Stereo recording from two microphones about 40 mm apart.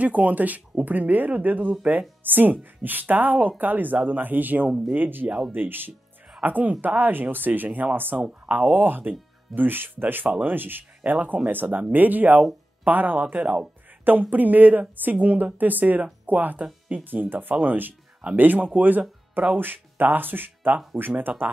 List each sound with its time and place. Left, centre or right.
0.0 s a woman's voice: right
2.2 s a woman's voice: right
6.4 s a woman's voice: right
8.2 s speech: right
8.7 s a woman's voice: right
11.1 s a woman's voice: right
14.3 s a woman's voice: right
20.9 s speech: centre